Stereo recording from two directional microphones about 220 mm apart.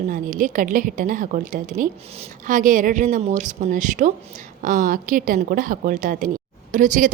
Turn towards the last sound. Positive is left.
turn(degrees=-35)  # may be behind; listen again after turning